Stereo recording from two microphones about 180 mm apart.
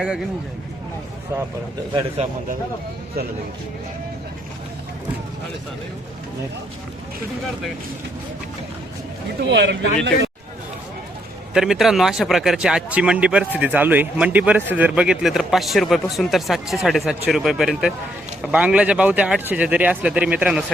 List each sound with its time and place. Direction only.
1.9 s a man's voice: 30° right (ahead or behind)
9.5 s speech: 75° right (ahead or behind)
11.5 s speech: centre (ahead or behind)